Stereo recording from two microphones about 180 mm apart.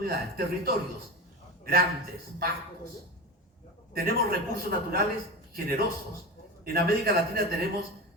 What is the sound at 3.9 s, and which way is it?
Speech, 55° right (ahead or behind).